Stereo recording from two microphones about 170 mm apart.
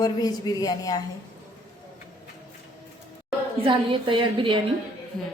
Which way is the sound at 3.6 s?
30° right (ahead or behind).